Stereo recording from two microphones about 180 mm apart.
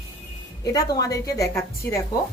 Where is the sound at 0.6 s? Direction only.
20° left (ahead or behind).